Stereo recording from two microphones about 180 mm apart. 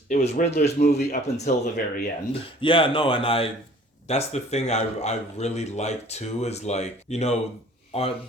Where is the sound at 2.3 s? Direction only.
30° left (ahead or behind).